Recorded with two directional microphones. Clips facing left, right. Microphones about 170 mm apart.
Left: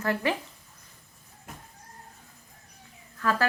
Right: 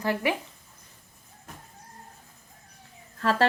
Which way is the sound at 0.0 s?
15° right (ahead or behind).